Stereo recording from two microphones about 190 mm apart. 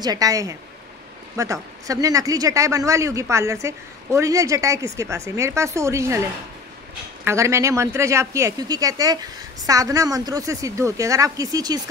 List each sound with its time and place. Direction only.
0.0 s speech: 20° right (ahead or behind)
7.2 s speech: 15° right (ahead or behind)